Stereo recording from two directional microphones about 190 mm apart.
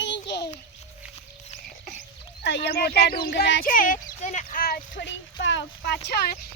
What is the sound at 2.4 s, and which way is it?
Speech, 65° left (ahead or behind).